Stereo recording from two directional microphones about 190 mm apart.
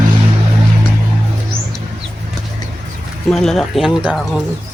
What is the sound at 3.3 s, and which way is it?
Speech, centre (ahead or behind).